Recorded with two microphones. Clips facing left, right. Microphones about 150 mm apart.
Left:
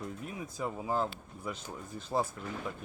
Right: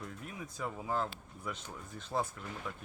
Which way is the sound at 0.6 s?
15° left (ahead or behind).